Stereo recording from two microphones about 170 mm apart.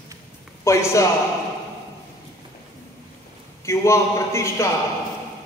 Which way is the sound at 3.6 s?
15° left (ahead or behind).